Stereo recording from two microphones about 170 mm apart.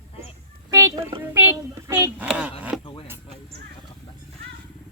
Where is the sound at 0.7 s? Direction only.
20° right (ahead or behind); by 2.9 s centre (ahead or behind).